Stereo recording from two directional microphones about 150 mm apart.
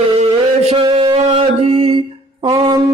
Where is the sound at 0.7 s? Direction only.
35° right (ahead or behind).